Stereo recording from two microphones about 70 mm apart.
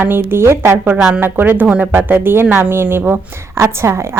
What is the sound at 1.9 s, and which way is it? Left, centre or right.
A woman's voice, right.